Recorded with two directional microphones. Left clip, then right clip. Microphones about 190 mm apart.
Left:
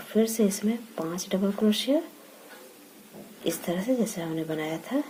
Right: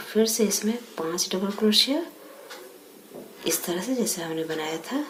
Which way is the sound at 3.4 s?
45° left (ahead or behind).